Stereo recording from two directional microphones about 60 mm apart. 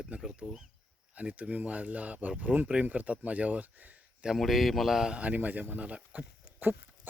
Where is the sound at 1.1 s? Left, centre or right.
Right.